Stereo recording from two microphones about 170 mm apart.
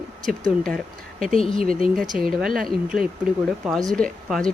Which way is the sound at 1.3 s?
35° left (ahead or behind).